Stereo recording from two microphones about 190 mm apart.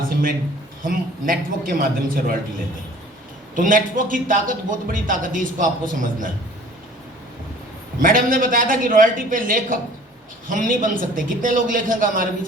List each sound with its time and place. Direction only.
0.0 s a sound: 50° right (ahead or behind)
0.8 s a man's voice: 45° right (ahead or behind)
3.5 s a man's voice: 45° right (ahead or behind)
8.0 s a man's voice: 45° right (ahead or behind)